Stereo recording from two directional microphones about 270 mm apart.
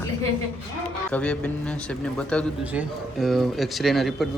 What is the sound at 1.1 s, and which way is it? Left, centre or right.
A man's voice, centre.